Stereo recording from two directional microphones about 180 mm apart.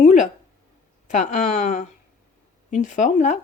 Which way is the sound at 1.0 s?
45° left (ahead or behind).